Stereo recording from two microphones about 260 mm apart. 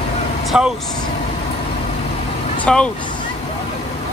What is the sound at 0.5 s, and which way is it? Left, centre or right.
Speech, centre.